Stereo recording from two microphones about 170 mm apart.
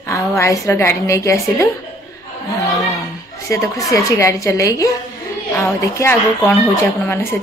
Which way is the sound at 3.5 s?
20° left (ahead or behind).